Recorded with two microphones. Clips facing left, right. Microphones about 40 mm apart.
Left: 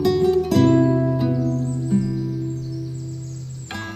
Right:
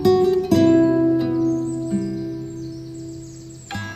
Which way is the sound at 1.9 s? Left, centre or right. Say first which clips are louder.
Left 5 dB; centre.